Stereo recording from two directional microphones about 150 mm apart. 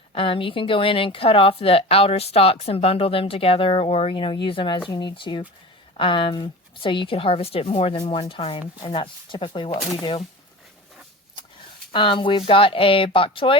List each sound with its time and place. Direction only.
0.1 s speech: 35° left (ahead or behind)
11.9 s speech: 35° left (ahead or behind)